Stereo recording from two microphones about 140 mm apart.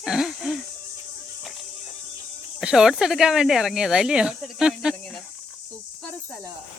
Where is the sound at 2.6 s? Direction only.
5° right (ahead or behind).